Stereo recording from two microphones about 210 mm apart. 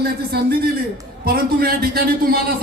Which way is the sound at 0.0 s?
50° right (ahead or behind).